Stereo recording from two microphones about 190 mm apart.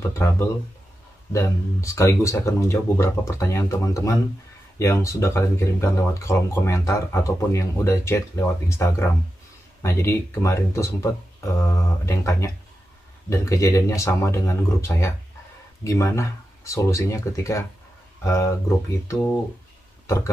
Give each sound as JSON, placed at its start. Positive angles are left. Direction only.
{"t": 1.3, "sound": "speech", "side_deg": 15}